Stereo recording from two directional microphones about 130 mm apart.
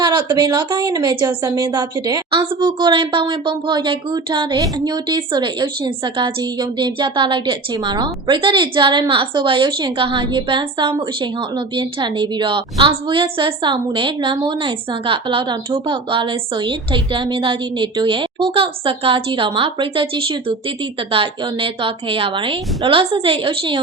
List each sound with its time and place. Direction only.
0.0 s a woman's voice: 35° right (ahead or behind)